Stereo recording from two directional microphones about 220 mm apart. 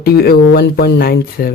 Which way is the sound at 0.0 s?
45° left (ahead or behind).